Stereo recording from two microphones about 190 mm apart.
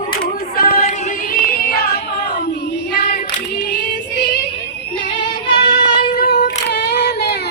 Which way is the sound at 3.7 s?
60° left (ahead or behind).